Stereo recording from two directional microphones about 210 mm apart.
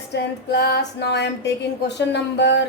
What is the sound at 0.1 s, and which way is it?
Speech, 55° left (ahead or behind).